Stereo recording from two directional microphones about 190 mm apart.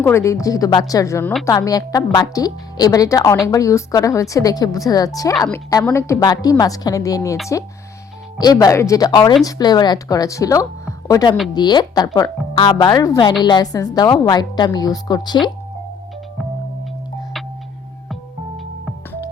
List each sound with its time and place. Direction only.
0.0 s a woman's voice: 15° left (ahead or behind)
8.4 s a woman's voice: 20° left (ahead or behind)
18.1 s music: centre (ahead or behind)